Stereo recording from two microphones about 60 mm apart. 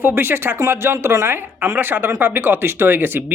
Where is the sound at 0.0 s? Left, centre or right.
Right.